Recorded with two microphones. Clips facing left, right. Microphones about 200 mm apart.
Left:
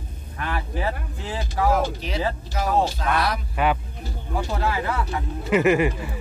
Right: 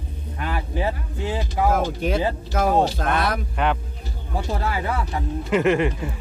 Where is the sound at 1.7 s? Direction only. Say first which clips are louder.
Right 2 dB; 50° right (ahead or behind).